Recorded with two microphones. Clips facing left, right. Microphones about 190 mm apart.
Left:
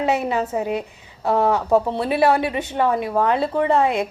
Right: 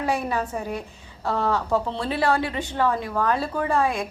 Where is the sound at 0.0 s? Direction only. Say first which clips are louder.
Left 4 dB; 20° left (ahead or behind).